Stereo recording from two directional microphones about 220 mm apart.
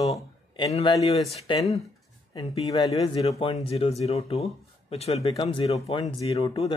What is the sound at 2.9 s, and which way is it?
Speech, 25° left (ahead or behind).